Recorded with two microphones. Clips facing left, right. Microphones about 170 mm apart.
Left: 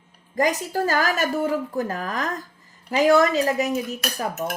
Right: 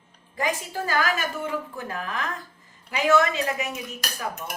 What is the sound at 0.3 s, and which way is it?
A woman's voice, 40° left (ahead or behind).